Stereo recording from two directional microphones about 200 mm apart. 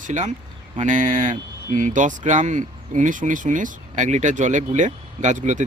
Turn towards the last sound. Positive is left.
turn(degrees=-35)  # may be behind; listen again after turning